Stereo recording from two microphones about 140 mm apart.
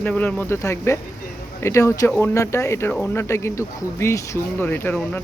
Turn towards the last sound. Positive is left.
turn(degrees=15)  # may be behind; listen again after turning